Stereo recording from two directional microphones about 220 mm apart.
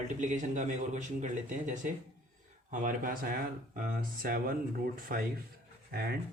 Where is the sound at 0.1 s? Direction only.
35° right (ahead or behind).